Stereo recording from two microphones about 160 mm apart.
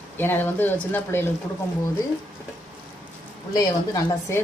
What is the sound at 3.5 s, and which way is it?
Speech, 20° left (ahead or behind).